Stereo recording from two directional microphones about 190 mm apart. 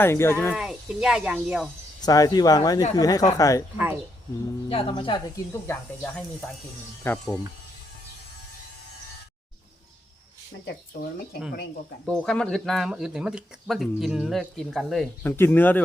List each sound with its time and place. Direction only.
0.0 s speech: 10° left (ahead or behind)
0.5 s speech: 5° right (ahead or behind)
2.0 s speech: 20° left (ahead or behind)
4.7 s speech: 30° left (ahead or behind)
5.6 s speech: 10° left (ahead or behind)
10.7 s speech: 55° left (ahead or behind)
12.0 s speech: 5° left (ahead or behind)
15.2 s speech: 10° left (ahead or behind)